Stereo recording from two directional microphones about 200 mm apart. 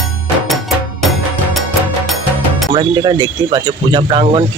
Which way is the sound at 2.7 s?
20° right (ahead or behind).